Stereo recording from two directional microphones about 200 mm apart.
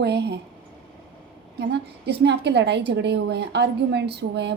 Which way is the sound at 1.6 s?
55° right (ahead or behind).